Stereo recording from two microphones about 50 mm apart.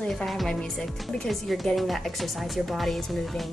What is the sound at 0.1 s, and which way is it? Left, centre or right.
Speech, centre.